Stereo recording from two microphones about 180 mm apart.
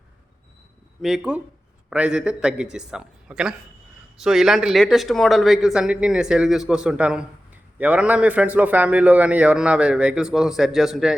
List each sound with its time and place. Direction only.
1.0 s speech: 5° right (ahead or behind)